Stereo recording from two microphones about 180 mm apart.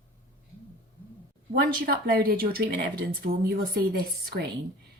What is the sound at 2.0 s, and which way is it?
Speech, 55° right (ahead or behind).